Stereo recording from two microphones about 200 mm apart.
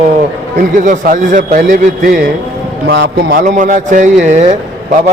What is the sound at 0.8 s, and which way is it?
A man's voice, 40° right (ahead or behind).